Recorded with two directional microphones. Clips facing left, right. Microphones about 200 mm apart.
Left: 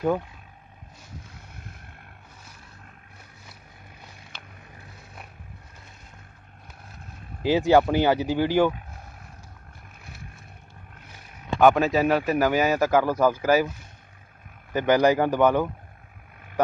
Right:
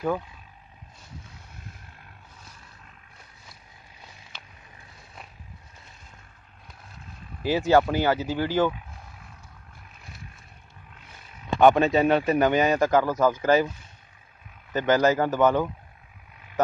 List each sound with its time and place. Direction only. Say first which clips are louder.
7.4 s speech: left 2 dB; 15° left (ahead or behind)
11.6 s speech: right 1 dB; 5° left (ahead or behind)
14.7 s speech: left 2 dB; 15° left (ahead or behind)